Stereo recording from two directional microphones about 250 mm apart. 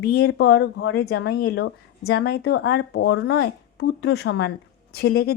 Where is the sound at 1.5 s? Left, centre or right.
Left.